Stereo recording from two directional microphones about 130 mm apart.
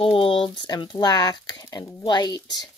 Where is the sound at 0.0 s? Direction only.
45° left (ahead or behind).